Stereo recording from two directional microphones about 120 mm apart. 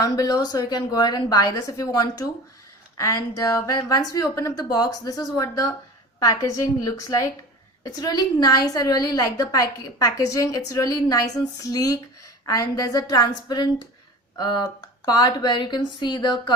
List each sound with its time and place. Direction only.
0.0 s a woman's voice: 30° left (ahead or behind)